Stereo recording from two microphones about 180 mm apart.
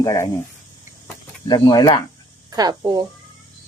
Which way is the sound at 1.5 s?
20° left (ahead or behind).